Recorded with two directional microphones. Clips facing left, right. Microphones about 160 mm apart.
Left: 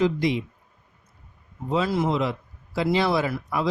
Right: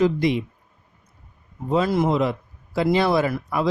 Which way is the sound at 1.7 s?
50° right (ahead or behind).